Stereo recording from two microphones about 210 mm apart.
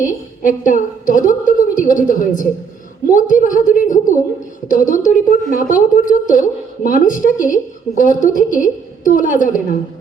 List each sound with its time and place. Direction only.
0.0 s a woman's voice: 40° left (ahead or behind)